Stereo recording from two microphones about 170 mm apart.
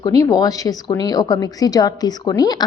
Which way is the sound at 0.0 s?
20° left (ahead or behind).